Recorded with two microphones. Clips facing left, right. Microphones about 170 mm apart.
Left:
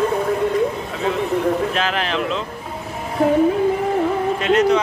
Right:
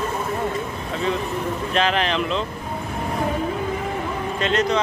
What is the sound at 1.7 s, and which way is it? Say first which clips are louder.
Speech: right 1 dB; 5° left (ahead or behind).